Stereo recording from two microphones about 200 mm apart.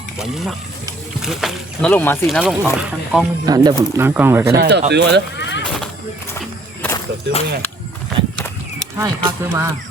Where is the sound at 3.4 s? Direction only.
20° right (ahead or behind).